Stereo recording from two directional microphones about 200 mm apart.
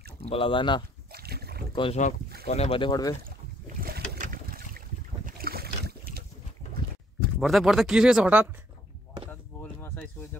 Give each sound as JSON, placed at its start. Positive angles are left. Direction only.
{"t": 0.2, "sound": "speech", "side_deg": 25}
{"t": 1.1, "sound": "boat", "side_deg": -50}
{"t": 1.8, "sound": "speech", "side_deg": 35}
{"t": 3.8, "sound": "boat", "side_deg": -50}
{"t": 7.3, "sound": "speech", "side_deg": 0}
{"t": 9.3, "sound": "a sound", "side_deg": 10}